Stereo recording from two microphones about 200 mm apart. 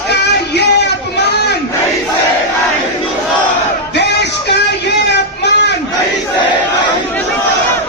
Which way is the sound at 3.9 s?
55° left (ahead or behind).